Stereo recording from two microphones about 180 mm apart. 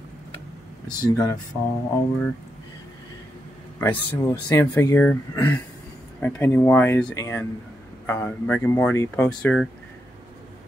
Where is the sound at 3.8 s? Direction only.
10° left (ahead or behind).